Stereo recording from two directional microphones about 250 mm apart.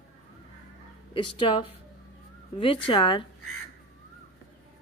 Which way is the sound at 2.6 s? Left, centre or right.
Left.